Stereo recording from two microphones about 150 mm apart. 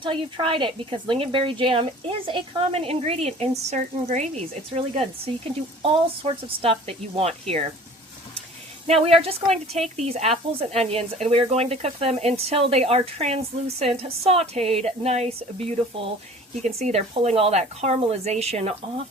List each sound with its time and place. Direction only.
0.0 s a woman's voice: 35° right (ahead or behind)
8.9 s speech: 40° right (ahead or behind)